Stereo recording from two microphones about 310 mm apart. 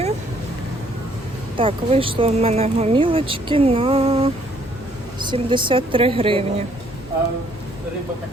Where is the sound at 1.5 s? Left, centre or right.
Centre.